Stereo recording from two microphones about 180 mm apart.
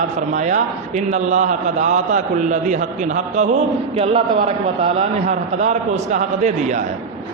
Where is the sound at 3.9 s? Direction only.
30° right (ahead or behind).